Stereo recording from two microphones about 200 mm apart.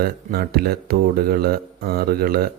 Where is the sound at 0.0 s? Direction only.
50° right (ahead or behind).